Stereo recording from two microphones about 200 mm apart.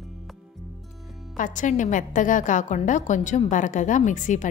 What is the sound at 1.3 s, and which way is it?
A woman's voice, 40° left (ahead or behind).